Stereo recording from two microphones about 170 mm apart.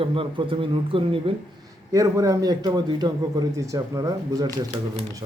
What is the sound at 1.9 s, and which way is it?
A man's voice, 20° right (ahead or behind).